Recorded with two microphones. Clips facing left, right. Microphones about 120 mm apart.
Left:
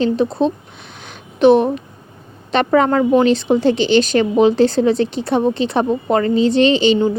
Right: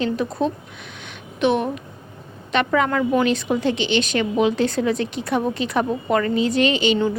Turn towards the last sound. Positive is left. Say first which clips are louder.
# left 6 dB
turn(degrees=30)  # may be behind; listen again after turning